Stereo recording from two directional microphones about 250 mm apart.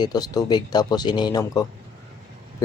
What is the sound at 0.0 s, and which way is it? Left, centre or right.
Speech, centre.